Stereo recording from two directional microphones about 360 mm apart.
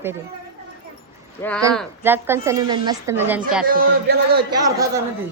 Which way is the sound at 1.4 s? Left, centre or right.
Centre.